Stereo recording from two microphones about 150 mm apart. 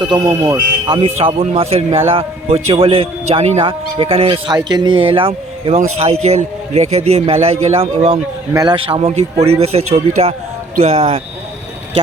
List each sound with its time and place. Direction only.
0.1 s speech: 25° right (ahead or behind)
0.9 s a man's voice: 40° right (ahead or behind)
8.5 s a man's voice: 30° right (ahead or behind); by 11.0 s 50° right (ahead or behind)